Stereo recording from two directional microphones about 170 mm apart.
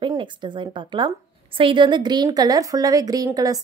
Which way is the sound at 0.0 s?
30° right (ahead or behind).